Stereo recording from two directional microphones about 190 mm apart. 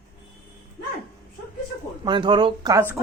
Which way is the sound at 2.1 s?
25° right (ahead or behind).